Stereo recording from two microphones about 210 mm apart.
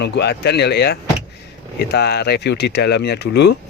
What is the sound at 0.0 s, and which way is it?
A man's voice, 50° left (ahead or behind).